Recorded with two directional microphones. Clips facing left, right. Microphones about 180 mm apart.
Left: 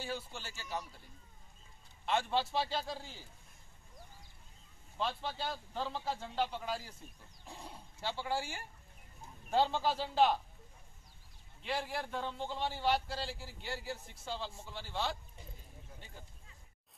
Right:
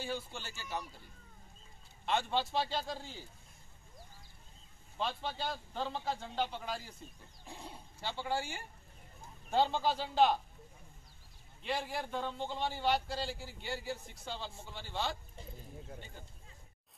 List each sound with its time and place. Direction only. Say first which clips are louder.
0.0 s a man's voice: right 2 dB; 5° left (ahead or behind)
2.0 s a man's voice: even; centre (ahead or behind)
4.9 s a man's voice: even; centre (ahead or behind)
11.6 s a man's voice: right 1 dB; centre (ahead or behind)